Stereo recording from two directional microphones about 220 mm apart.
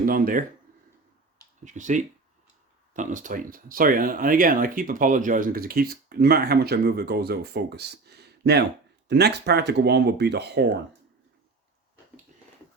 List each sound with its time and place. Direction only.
0.0 s speech: 40° right (ahead or behind)
1.6 s speech: 35° right (ahead or behind); by 10.8 s 50° right (ahead or behind)